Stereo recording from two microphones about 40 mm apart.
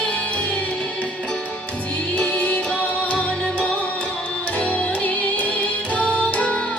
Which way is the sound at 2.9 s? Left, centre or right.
Left.